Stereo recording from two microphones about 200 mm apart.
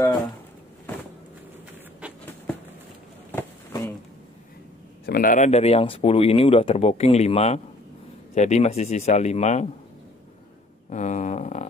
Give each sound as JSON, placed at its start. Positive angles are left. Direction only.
{"t": 3.3, "sound": "a sound", "side_deg": 10}
{"t": 5.0, "sound": "speech", "side_deg": 45}
{"t": 10.9, "sound": "speech", "side_deg": 35}